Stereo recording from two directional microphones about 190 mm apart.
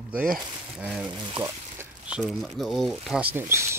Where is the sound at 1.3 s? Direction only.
15° right (ahead or behind).